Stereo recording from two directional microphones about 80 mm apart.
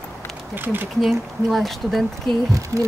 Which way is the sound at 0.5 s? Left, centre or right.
Right.